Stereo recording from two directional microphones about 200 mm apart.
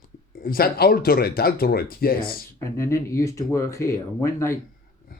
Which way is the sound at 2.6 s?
15° left (ahead or behind).